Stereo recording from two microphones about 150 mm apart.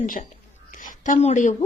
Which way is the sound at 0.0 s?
65° left (ahead or behind).